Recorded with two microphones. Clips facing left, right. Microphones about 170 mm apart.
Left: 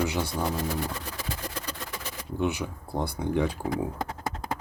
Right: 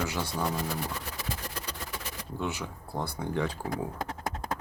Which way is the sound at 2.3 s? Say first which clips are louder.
Left 6 dB; 15° left (ahead or behind).